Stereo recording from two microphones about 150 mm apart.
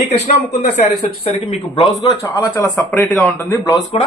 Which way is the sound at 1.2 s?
40° left (ahead or behind).